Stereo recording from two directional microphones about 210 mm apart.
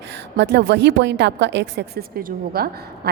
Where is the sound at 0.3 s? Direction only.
55° right (ahead or behind).